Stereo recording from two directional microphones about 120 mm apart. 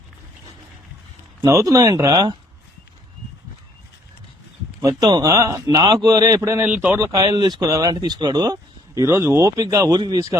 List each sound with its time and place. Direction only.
1.4 s speech: 30° right (ahead or behind)
4.8 s a man's voice: 30° right (ahead or behind)
6.6 s speech: 15° right (ahead or behind)
7.1 s a man's voice: 30° right (ahead or behind)
9.0 s a man's voice: 25° right (ahead or behind)